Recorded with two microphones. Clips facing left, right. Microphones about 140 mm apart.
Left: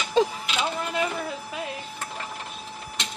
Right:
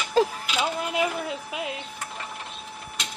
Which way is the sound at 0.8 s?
15° right (ahead or behind).